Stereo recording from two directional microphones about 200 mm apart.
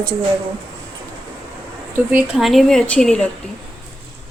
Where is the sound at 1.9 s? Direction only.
10° right (ahead or behind).